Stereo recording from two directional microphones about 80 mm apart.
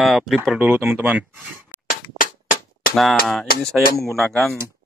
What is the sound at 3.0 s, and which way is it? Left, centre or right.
Speech, centre.